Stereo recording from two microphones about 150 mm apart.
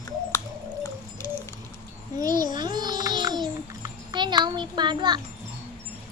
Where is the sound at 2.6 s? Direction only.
30° right (ahead or behind).